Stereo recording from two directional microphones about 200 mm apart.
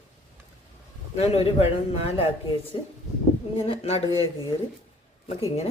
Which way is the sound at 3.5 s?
30° left (ahead or behind).